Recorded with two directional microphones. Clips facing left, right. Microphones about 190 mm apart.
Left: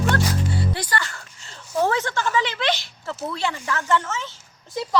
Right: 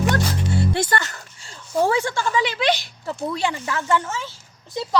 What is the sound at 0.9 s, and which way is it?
Speech, 45° right (ahead or behind).